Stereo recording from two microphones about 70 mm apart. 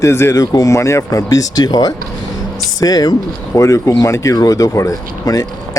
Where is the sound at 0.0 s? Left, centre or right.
Left.